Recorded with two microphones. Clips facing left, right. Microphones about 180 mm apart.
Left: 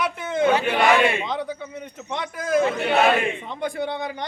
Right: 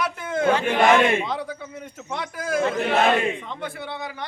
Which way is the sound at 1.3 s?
5° right (ahead or behind).